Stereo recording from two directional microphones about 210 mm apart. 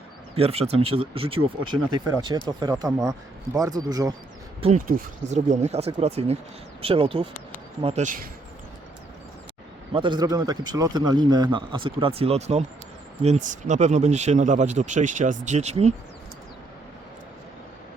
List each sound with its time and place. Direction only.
0.3 s a man's voice: 30° right (ahead or behind)
4.6 s a man's voice: 35° right (ahead or behind)
9.9 s a man's voice: 20° right (ahead or behind)